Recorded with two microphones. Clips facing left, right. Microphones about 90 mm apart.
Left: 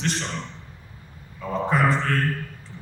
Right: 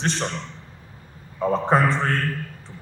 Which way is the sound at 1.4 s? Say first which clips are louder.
Right 3 dB; 35° right (ahead or behind).